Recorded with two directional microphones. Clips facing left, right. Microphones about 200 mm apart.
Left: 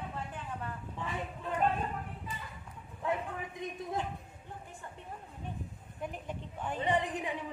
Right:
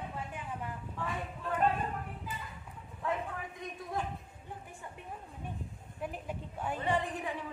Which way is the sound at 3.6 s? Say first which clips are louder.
Left 6 dB; 20° left (ahead or behind).